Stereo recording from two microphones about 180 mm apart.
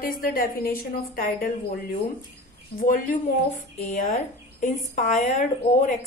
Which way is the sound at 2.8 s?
45° left (ahead or behind).